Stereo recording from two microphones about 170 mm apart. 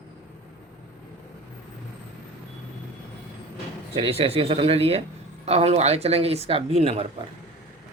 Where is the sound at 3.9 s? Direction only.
35° right (ahead or behind).